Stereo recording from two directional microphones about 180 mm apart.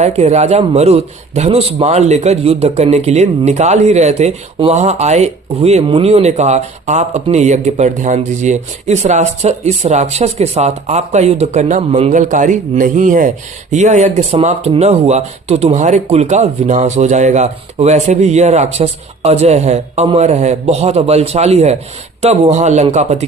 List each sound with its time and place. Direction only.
0.0 s a man's voice: 35° right (ahead or behind)